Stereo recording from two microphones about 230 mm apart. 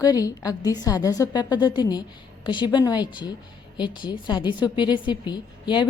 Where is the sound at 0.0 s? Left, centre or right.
Centre.